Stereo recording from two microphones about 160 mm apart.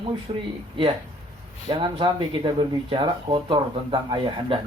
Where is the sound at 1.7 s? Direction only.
30° right (ahead or behind).